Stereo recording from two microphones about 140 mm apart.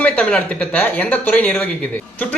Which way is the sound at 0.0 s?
10° left (ahead or behind).